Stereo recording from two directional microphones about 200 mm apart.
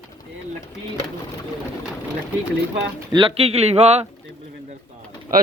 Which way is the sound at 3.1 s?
25° right (ahead or behind).